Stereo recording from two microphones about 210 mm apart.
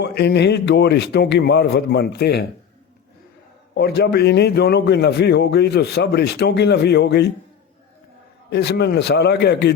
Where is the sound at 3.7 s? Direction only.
50° left (ahead or behind).